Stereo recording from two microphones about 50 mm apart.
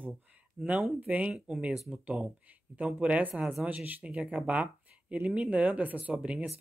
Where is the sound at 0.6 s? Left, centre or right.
Centre.